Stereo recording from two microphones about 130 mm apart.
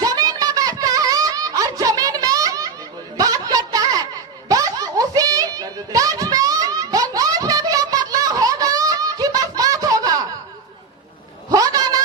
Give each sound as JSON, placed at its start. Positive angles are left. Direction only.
{"t": 0.0, "sound": "a sound", "side_deg": -30}
{"t": 3.2, "sound": "snicker", "side_deg": -30}
{"t": 11.5, "sound": "cat", "side_deg": -30}